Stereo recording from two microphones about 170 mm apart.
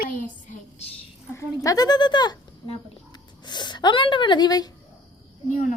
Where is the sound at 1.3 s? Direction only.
20° left (ahead or behind).